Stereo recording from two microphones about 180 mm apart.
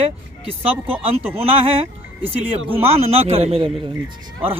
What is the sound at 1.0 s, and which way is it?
Speech, 35° right (ahead or behind).